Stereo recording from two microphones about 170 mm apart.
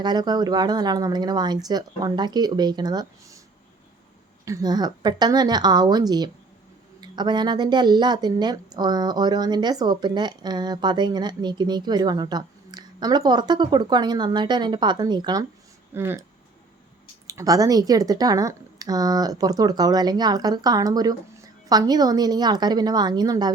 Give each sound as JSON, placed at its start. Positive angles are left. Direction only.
{"t": 0.0, "sound": "speech", "side_deg": -25}
{"t": 4.4, "sound": "speech", "side_deg": -20}
{"t": 16.0, "sound": "speech", "side_deg": -15}
{"t": 17.2, "sound": "speech", "side_deg": -20}